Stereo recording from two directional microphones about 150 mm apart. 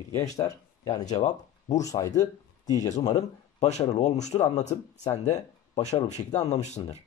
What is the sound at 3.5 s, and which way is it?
Speech, 50° left (ahead or behind).